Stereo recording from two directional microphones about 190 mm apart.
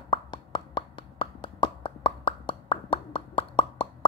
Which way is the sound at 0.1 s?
25° left (ahead or behind).